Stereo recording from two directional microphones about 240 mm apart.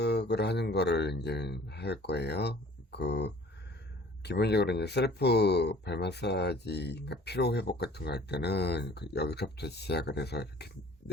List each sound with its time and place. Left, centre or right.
0.0 s speech: left